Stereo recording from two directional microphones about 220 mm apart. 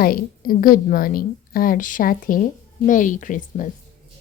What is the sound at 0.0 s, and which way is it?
A woman's voice, 40° left (ahead or behind).